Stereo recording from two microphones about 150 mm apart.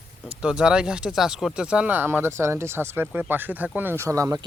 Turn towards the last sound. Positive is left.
turn(degrees=-20)  # may be behind; listen again after turning